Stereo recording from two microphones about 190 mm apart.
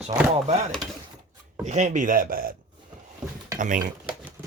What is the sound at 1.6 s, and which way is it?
Speech, 40° right (ahead or behind).